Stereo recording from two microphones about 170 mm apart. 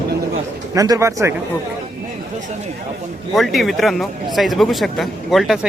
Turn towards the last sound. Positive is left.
turn(degrees=0)  # may be behind; listen again after turning